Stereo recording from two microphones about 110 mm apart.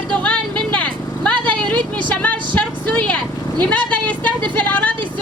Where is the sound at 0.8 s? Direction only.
10° left (ahead or behind).